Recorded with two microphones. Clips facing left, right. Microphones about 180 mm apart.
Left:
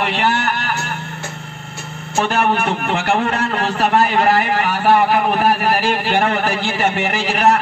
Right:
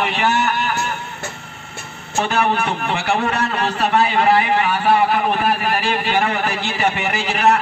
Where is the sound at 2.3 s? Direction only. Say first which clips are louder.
Even; 55° left (ahead or behind).